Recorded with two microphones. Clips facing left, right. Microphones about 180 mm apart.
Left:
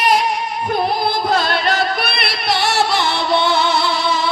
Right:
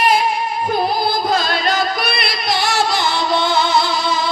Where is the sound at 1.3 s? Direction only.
65° left (ahead or behind).